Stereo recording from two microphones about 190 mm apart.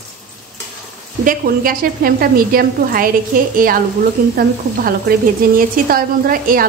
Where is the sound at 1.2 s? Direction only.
45° right (ahead or behind).